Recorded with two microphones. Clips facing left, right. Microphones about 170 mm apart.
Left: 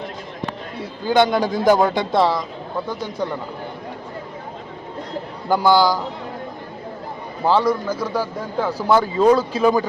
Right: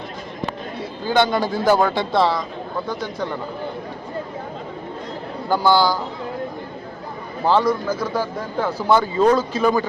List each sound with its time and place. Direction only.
1.1 s speech: 15° left (ahead or behind)
5.5 s speech: 15° left (ahead or behind)
7.4 s speech: 5° left (ahead or behind)